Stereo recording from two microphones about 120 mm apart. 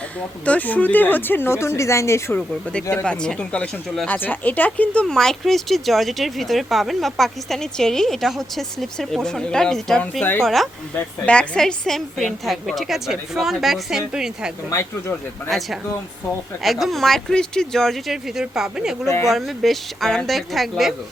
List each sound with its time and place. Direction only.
0.4 s a woman's voice: 10° left (ahead or behind)
2.9 s speech: 5° left (ahead or behind)
14.7 s speech: 25° left (ahead or behind)
15.4 s speech: centre (ahead or behind)
16.8 s speech: centre (ahead or behind)
19.0 s speech: 25° left (ahead or behind)
19.3 s speech: centre (ahead or behind)